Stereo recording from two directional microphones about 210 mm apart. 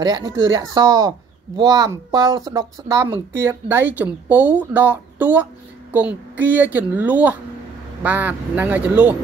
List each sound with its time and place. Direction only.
0.0 s speech: 20° right (ahead or behind)